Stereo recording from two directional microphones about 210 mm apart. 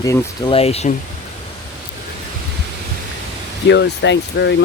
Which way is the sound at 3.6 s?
55° left (ahead or behind).